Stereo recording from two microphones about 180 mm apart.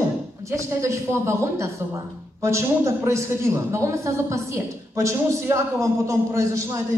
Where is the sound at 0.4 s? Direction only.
15° right (ahead or behind).